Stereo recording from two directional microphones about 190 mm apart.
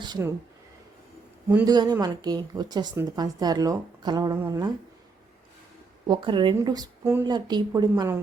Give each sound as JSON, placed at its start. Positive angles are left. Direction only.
{"t": 0.0, "sound": "a woman's voice", "side_deg": -20}
{"t": 1.6, "sound": "a woman's voice", "side_deg": -20}
{"t": 6.1, "sound": "a woman's voice", "side_deg": -25}
{"t": 7.3, "sound": "a woman's voice", "side_deg": -20}